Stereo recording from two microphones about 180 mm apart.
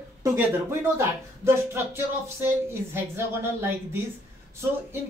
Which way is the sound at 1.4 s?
15° right (ahead or behind).